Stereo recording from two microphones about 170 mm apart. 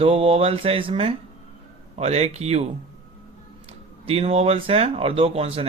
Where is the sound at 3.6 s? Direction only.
35° right (ahead or behind).